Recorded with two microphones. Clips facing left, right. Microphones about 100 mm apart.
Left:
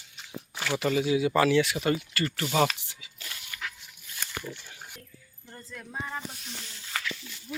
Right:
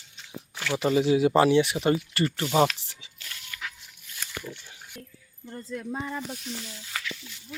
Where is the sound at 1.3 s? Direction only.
25° right (ahead or behind).